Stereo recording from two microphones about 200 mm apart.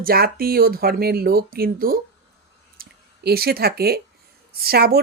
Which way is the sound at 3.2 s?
50° right (ahead or behind).